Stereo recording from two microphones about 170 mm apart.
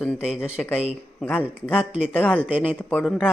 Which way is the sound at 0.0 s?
Centre (ahead or behind).